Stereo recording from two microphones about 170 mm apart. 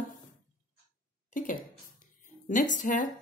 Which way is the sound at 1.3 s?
50° left (ahead or behind).